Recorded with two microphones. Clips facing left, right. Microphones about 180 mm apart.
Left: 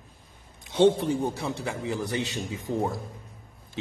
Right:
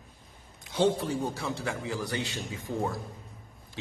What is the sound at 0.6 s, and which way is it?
A man's voice, 25° left (ahead or behind).